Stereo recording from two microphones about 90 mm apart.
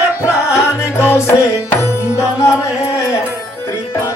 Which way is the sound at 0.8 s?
30° left (ahead or behind).